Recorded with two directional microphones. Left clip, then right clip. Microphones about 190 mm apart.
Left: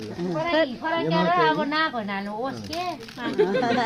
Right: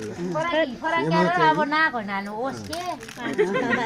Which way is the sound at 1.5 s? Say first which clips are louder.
Right 3 dB; 15° right (ahead or behind).